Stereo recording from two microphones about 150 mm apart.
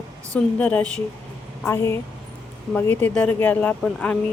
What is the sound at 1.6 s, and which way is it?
Speech, 15° left (ahead or behind).